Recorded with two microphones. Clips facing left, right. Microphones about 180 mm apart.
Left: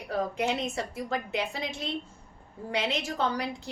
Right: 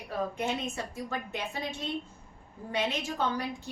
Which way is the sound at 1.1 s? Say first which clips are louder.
Left 5 dB; 90° left.